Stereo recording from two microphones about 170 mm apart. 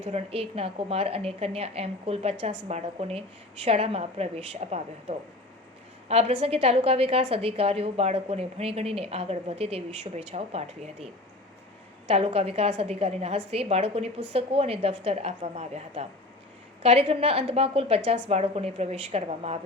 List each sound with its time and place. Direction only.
0.1 s a woman's voice: 35° right (ahead or behind)
2.3 s a woman's voice: 90° right
2.6 s a woman's voice: 40° right (ahead or behind)
12.1 s a woman's voice: 35° right (ahead or behind)